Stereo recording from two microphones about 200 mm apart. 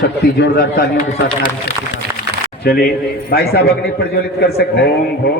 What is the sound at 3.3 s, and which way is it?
A man's voice, 50° left (ahead or behind).